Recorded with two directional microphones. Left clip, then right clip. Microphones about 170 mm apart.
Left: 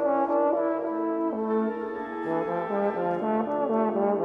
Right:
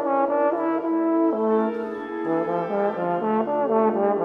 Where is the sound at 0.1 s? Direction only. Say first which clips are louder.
Right 3 dB; 30° right (ahead or behind).